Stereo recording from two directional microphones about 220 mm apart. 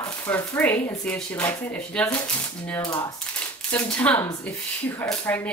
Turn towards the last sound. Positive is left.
turn(degrees=5)  # may be behind; listen again after turning